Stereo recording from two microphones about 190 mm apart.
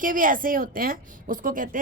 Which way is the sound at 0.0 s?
45° right (ahead or behind).